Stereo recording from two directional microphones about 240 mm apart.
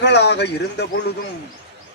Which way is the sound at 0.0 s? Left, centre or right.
Left.